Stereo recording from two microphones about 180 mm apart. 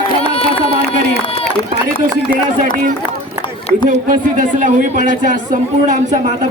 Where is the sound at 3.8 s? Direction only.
45° right (ahead or behind).